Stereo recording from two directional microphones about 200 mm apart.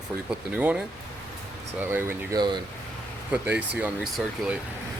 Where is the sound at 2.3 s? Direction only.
20° right (ahead or behind).